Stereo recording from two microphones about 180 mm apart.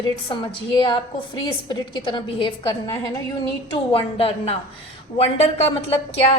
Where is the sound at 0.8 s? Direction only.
25° left (ahead or behind).